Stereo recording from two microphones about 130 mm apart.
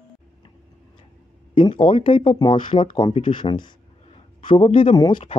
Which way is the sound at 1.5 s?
40° left (ahead or behind).